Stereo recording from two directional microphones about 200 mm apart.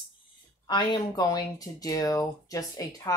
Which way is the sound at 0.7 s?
20° left (ahead or behind).